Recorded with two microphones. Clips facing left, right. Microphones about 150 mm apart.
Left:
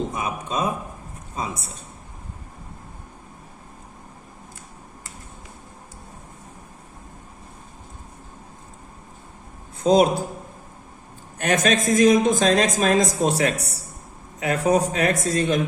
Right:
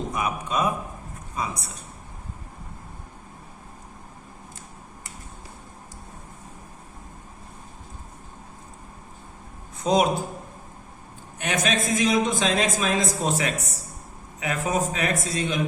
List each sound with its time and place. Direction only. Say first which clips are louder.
0.1 s a man's voice: even; 30° left (ahead or behind)
9.8 s a man's voice: left 5 dB; 35° left (ahead or behind)
11.4 s speech: left 5 dB; 45° left (ahead or behind)